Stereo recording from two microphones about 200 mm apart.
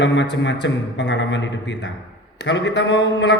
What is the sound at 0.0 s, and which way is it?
A man's voice, 60° left (ahead or behind).